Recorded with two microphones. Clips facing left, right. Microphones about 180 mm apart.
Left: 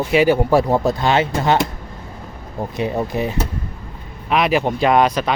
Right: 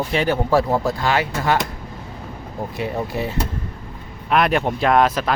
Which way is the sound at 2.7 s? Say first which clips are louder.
Left 4 dB; 20° left (ahead or behind).